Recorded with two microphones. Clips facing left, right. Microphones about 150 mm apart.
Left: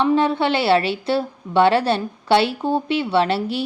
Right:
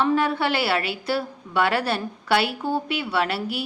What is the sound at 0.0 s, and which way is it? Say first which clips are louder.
A woman's voice: left 4 dB; 20° left (ahead or behind).